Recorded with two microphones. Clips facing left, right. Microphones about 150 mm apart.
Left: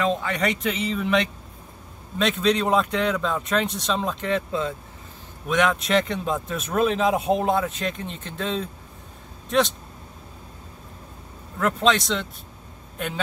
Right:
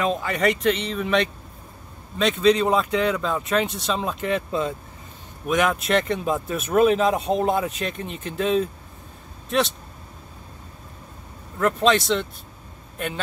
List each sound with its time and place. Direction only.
0.0 s speech: 5° right (ahead or behind)
11.6 s a man's voice: centre (ahead or behind)